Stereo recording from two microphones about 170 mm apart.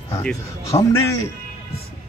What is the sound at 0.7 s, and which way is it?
Speech, 20° left (ahead or behind).